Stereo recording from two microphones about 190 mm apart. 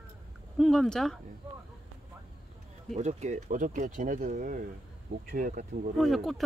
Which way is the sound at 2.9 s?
35° right (ahead or behind).